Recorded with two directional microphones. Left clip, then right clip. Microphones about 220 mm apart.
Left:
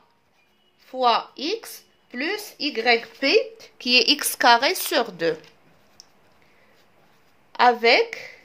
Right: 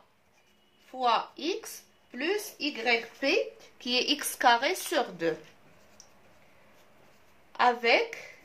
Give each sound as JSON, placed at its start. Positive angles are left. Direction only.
{"t": 0.8, "sound": "a woman's voice", "side_deg": 50}
{"t": 6.0, "sound": "a sound", "side_deg": 50}
{"t": 7.5, "sound": "a woman's voice", "side_deg": 50}